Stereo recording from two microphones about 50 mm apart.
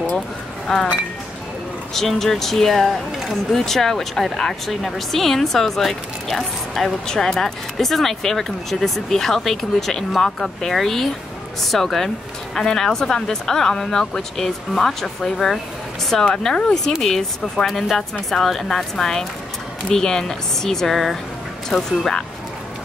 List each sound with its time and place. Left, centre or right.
0.7 s speech: centre
2.0 s speech: centre